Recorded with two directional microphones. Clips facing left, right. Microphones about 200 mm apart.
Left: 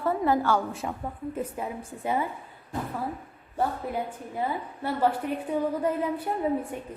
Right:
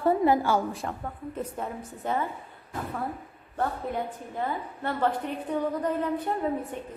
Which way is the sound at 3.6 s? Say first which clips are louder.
Left 1 dB; 10° left (ahead or behind).